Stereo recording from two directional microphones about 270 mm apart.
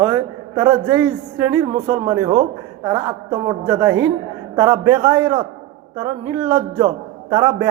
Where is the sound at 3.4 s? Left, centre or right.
Centre.